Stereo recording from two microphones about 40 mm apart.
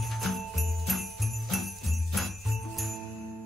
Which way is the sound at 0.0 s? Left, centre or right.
Centre.